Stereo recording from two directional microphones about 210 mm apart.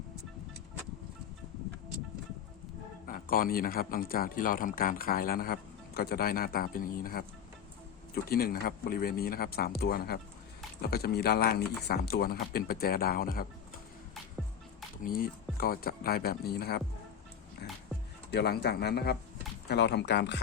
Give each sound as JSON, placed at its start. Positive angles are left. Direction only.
{"t": 3.1, "sound": "speech", "side_deg": 40}
{"t": 15.0, "sound": "speech", "side_deg": 45}
{"t": 18.3, "sound": "speech", "side_deg": 50}